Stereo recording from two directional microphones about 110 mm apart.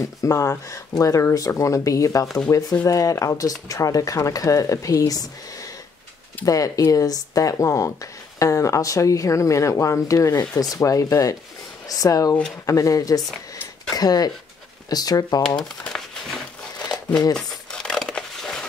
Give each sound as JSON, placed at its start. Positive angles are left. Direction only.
{"t": 0.0, "sound": "speech", "side_deg": 30}
{"t": 15.4, "sound": "crumpling", "side_deg": 5}
{"t": 17.6, "sound": "crushing", "side_deg": 5}